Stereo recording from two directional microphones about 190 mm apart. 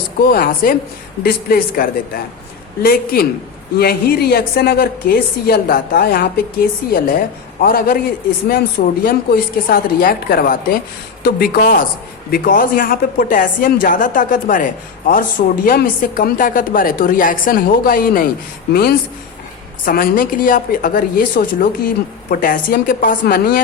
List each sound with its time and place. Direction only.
0.3 s a woman's voice: 50° left (ahead or behind)